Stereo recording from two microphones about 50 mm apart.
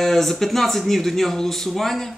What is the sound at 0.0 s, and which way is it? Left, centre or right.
Speech, centre.